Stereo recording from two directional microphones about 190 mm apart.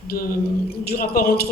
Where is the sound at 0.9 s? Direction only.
50° left (ahead or behind).